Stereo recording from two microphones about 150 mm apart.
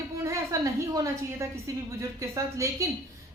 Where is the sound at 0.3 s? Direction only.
20° right (ahead or behind).